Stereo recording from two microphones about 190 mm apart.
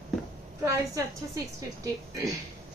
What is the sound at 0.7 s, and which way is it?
A woman's voice, 15° right (ahead or behind).